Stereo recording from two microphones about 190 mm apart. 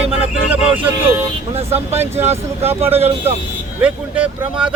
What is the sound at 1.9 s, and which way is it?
Speech, 10° right (ahead or behind).